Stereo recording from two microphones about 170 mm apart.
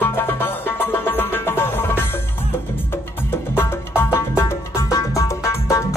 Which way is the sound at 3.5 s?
15° left (ahead or behind).